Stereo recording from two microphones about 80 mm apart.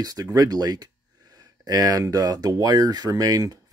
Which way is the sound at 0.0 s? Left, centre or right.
Right.